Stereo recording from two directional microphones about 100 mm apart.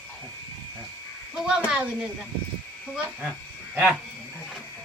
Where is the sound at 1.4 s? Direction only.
10° right (ahead or behind).